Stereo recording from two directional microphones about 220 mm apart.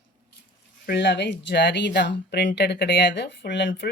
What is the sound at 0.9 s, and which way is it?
Speech, 50° left (ahead or behind).